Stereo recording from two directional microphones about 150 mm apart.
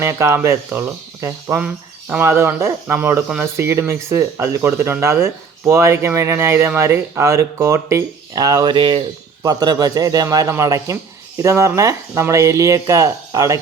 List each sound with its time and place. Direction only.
0.0 s a man's voice: 20° right (ahead or behind)